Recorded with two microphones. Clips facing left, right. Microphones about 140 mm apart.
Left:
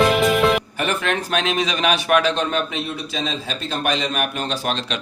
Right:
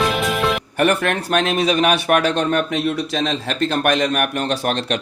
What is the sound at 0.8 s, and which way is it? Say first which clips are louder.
Speech: right 5 dB; 55° right (ahead or behind).